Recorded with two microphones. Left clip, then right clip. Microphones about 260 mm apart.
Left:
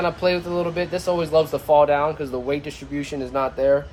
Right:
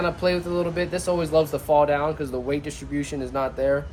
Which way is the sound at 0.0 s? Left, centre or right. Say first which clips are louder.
Left 2 dB; left.